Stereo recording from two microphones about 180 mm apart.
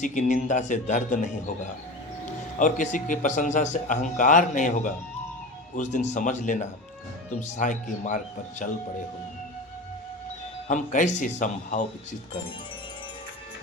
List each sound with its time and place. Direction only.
0.0 s speech: 45° left (ahead or behind)
10.7 s speech: 45° left (ahead or behind)